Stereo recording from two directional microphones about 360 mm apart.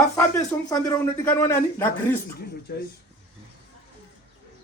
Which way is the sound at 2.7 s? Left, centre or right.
Left.